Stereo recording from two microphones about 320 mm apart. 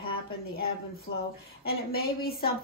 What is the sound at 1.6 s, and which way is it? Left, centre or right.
Speech, left.